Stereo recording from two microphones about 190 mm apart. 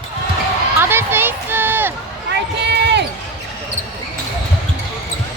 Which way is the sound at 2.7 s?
60° right (ahead or behind).